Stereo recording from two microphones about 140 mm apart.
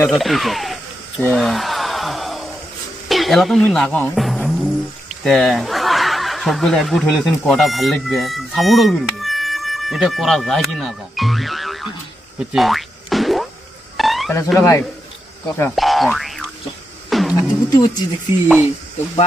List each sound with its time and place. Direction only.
0.2 s speech: centre (ahead or behind)
1.3 s a sound: centre (ahead or behind)
3.1 s speech: centre (ahead or behind)
4.1 s music: centre (ahead or behind)
5.2 s speech: centre (ahead or behind)
12.4 s boing: centre (ahead or behind)
13.9 s a sound: centre (ahead or behind)
14.6 s a man's voice: 20° left (ahead or behind)
15.7 s speech: centre (ahead or behind)
17.1 s music: centre (ahead or behind)
17.4 s music: 30° left (ahead or behind)